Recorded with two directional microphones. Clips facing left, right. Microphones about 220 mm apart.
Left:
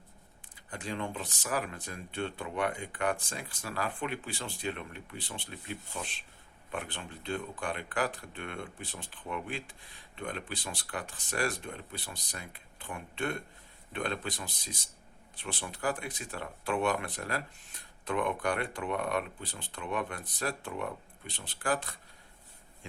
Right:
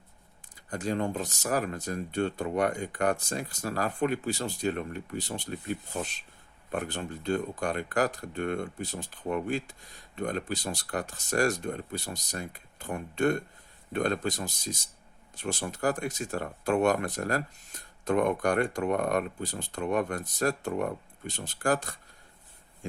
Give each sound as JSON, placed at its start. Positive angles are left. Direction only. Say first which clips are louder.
{"t": 0.7, "sound": "speech", "louder": "right 7 dB", "side_deg": -45}